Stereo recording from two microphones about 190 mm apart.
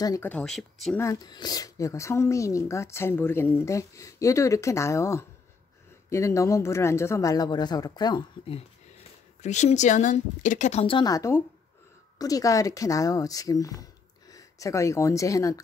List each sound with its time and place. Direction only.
0.0 s speech: 15° left (ahead or behind)
0.9 s speech: 15° left (ahead or behind)
9.4 s speech: 35° left (ahead or behind); by 15.6 s 15° left (ahead or behind)